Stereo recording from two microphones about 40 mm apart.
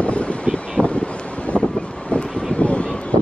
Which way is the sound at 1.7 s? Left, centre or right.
Left.